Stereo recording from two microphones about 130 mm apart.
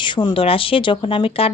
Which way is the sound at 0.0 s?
35° left (ahead or behind).